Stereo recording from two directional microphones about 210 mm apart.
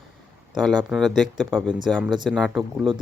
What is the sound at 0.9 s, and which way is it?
Speech, centre (ahead or behind).